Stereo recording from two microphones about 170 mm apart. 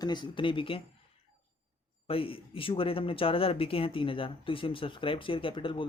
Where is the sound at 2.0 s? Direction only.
35° left (ahead or behind).